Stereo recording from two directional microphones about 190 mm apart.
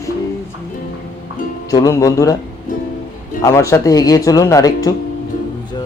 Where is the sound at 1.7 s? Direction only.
20° left (ahead or behind).